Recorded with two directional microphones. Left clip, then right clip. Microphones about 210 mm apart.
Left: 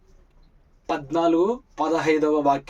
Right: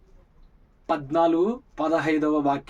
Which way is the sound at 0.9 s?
15° right (ahead or behind).